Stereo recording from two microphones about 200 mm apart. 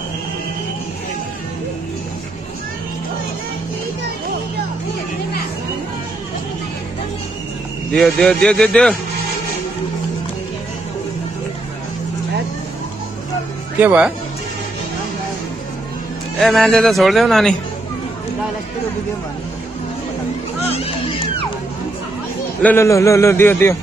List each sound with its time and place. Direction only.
7.9 s speech: 5° left (ahead or behind)
13.7 s speech: 10° right (ahead or behind)
16.3 s speech: centre (ahead or behind)
20.7 s baby cry: 30° left (ahead or behind)
22.6 s a man's voice: 10° left (ahead or behind)